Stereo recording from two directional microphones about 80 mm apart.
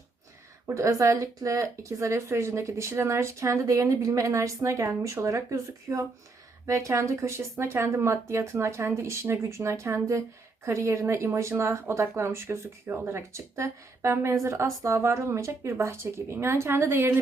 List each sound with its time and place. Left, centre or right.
0.7 s speech: right